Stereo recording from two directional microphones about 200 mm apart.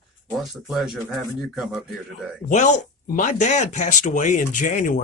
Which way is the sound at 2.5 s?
40° left (ahead or behind).